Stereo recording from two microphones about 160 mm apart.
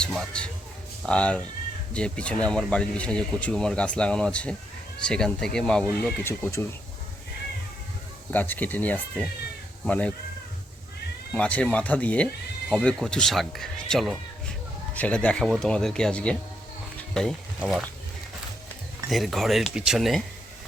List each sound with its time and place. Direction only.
0.0 s a man's voice: 5° left (ahead or behind)
6.2 s speech: 15° left (ahead or behind)
8.3 s speech: 10° left (ahead or behind)
11.3 s speech: 10° left (ahead or behind)
17.0 s insect: 5° left (ahead or behind)
17.6 s speech: 5° right (ahead or behind)
19.1 s speech: centre (ahead or behind)